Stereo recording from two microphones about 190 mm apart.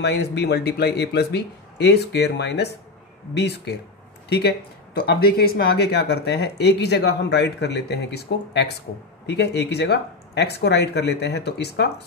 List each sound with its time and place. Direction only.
0.0 s speech: 60° left (ahead or behind)